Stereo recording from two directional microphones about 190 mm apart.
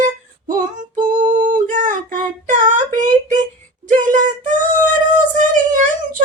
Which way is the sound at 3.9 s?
40° right (ahead or behind).